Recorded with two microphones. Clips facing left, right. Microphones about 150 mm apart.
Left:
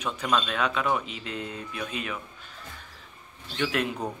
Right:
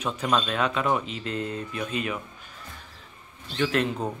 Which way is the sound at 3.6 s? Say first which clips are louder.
Right 3 dB; 5° left (ahead or behind).